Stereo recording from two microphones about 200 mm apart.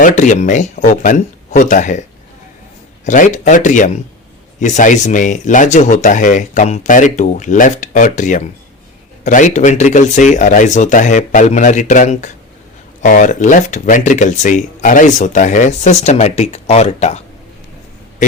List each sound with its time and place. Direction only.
0.0 s speech: 40° left (ahead or behind)
3.1 s speech: 40° left (ahead or behind)